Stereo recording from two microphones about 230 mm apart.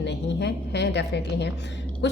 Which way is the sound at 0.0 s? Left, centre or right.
Left.